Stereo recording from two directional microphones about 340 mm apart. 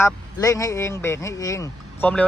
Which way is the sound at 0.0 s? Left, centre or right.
Centre.